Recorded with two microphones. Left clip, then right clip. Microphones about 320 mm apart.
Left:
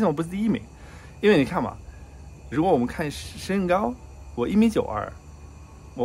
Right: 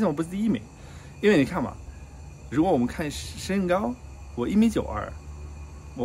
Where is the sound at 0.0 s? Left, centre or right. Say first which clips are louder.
Left 2 dB; centre.